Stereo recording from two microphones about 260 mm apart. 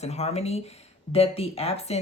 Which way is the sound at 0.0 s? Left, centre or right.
Left.